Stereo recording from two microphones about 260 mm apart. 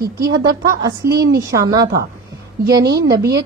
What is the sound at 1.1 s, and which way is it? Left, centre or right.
Speech, right.